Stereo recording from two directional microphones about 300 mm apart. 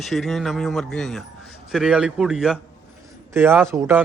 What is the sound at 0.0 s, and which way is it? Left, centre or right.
A man's voice, centre.